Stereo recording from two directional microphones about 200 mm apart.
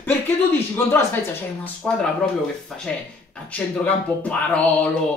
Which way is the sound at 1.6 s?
5° left (ahead or behind).